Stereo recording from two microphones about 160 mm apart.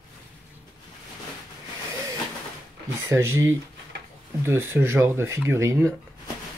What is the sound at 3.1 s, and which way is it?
Speech, 15° right (ahead or behind).